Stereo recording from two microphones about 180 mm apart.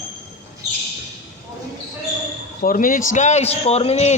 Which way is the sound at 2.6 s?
50° left (ahead or behind).